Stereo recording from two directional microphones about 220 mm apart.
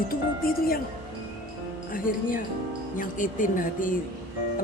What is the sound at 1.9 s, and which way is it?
Speech, 40° left (ahead or behind).